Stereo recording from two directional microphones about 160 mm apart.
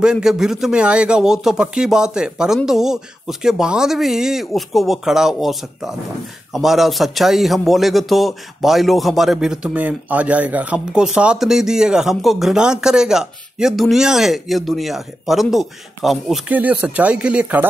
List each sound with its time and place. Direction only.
0.0 s speech: 5° right (ahead or behind)